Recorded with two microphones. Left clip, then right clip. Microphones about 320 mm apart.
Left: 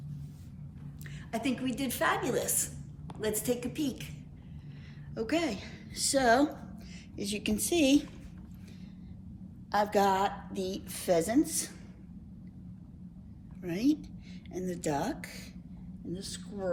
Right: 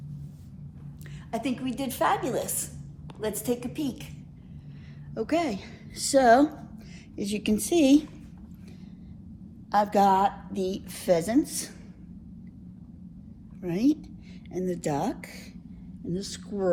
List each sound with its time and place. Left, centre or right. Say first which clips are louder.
1.3 s a woman's voice: right 3 dB; centre
5.1 s a woman's voice: right 4 dB; centre
9.7 s a woman's voice: right 5 dB; right
13.6 s a woman's voice: right 4 dB; centre